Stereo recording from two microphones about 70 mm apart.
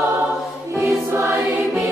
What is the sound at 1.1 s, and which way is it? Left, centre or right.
Music, right.